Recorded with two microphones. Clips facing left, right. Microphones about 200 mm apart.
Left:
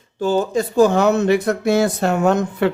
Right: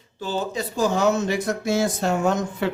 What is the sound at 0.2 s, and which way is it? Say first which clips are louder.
Speech: left 9 dB; 50° left (ahead or behind).